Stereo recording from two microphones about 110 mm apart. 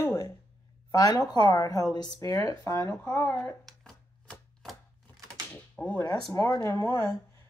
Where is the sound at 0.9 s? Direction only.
35° left (ahead or behind); by 3.5 s 20° left (ahead or behind).